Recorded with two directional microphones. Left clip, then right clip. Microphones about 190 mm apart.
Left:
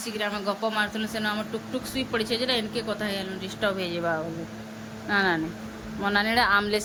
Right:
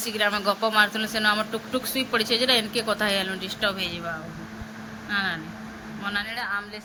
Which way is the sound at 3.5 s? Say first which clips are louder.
Right 1 dB; 15° left (ahead or behind).